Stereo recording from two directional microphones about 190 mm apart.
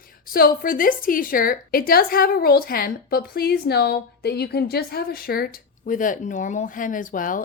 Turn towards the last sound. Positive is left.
turn(degrees=45)  # may be behind; listen again after turning